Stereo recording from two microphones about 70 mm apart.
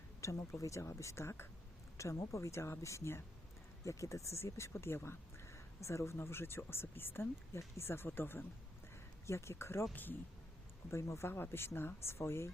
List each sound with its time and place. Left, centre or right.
0.2 s speech: left
9.2 s speech: left
9.9 s speech: left
10.9 s speech: left